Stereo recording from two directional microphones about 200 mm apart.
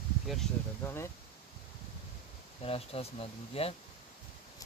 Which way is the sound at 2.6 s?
30° left (ahead or behind).